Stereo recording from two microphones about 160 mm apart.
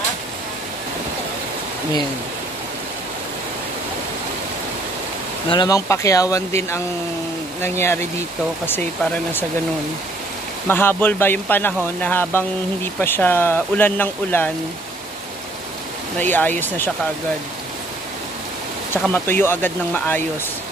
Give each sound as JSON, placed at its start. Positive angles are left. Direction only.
{"t": 5.5, "sound": "speech", "side_deg": 30}
{"t": 10.7, "sound": "speech", "side_deg": 15}
{"t": 16.2, "sound": "speech", "side_deg": 10}
{"t": 19.1, "sound": "speech", "side_deg": 15}